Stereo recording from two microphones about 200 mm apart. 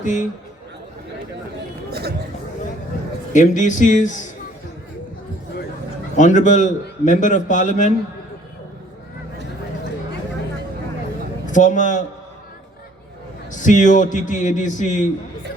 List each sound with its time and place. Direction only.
0.0 s a man's voice: 40° left (ahead or behind)
1.9 s speech: 55° right (ahead or behind)
3.3 s a man's voice: 40° left (ahead or behind)
6.1 s a man's voice: 40° left (ahead or behind)
11.5 s a man's voice: 40° left (ahead or behind)
13.6 s a man's voice: 40° left (ahead or behind)